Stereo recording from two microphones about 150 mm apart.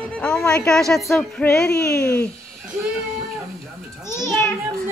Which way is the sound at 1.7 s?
20° left (ahead or behind).